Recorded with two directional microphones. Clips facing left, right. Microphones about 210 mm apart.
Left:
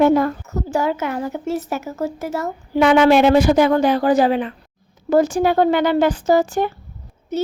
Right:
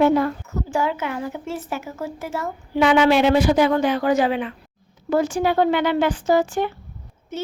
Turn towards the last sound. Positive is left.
turn(degrees=40)  # may be behind; listen again after turning